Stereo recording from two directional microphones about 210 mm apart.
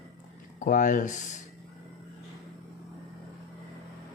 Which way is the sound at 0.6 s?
40° left (ahead or behind).